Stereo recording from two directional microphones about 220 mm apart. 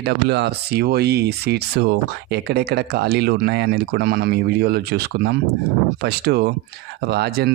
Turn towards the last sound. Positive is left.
turn(degrees=-45)  # may be behind; listen again after turning